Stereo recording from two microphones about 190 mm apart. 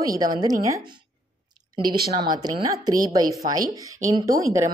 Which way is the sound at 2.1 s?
25° right (ahead or behind).